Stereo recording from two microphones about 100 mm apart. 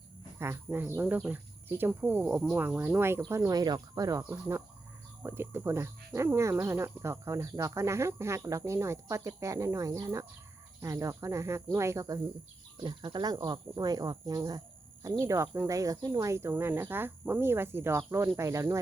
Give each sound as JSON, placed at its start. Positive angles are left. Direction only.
{"t": 0.3, "sound": "speech", "side_deg": -25}
{"t": 2.9, "sound": "speech", "side_deg": -25}
{"t": 3.6, "sound": "speech", "side_deg": -40}
{"t": 4.2, "sound": "speech", "side_deg": -25}
{"t": 12.7, "sound": "speech", "side_deg": -55}
{"t": 15.2, "sound": "speech", "side_deg": -30}